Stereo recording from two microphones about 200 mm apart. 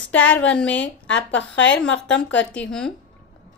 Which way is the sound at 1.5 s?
65° left (ahead or behind).